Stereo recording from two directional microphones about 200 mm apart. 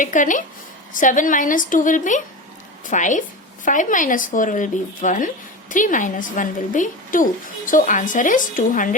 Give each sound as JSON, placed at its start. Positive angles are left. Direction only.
{"t": 0.0, "sound": "a woman's voice", "side_deg": 40}